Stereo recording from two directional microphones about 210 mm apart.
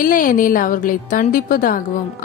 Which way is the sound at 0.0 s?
40° left (ahead or behind).